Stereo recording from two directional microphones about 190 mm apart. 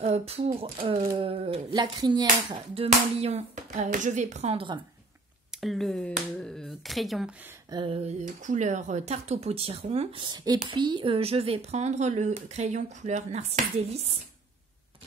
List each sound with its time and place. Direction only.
0.0 s speech: 35° right (ahead or behind)
5.5 s speech: centre (ahead or behind)
7.7 s speech: 25° right (ahead or behind)
8.2 s speech: 40° right (ahead or behind)